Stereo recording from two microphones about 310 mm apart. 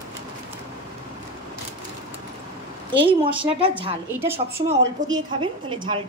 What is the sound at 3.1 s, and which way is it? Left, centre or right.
Speech, centre.